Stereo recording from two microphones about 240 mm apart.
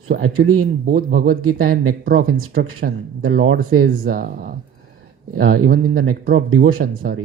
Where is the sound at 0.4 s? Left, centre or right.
Right.